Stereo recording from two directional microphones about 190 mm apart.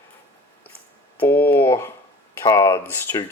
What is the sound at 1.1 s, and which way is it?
Speech, 10° left (ahead or behind).